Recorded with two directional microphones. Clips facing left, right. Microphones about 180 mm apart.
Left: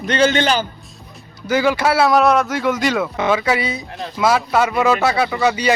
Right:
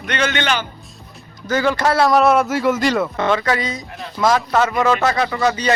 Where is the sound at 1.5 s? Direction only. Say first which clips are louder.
Left 1 dB; 10° left (ahead or behind).